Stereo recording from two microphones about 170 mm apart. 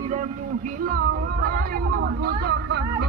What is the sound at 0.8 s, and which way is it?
Speech, 55° right (ahead or behind).